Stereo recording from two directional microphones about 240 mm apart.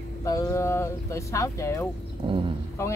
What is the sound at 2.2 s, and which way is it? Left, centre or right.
Speech, right.